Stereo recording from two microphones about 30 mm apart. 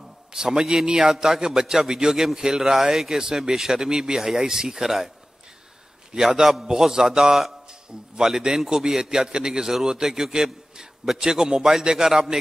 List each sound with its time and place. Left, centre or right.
0.3 s a man's voice: right
6.1 s a man's voice: centre
11.1 s a man's voice: right